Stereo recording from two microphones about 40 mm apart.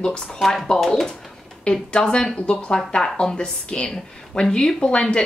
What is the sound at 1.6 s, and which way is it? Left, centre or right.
A woman's voice, left.